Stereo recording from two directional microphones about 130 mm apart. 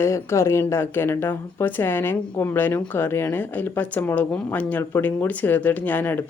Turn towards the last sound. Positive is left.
turn(degrees=15)  # may be behind; listen again after turning